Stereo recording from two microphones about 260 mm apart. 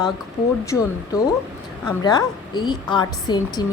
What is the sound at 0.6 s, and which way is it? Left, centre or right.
A woman's voice, centre.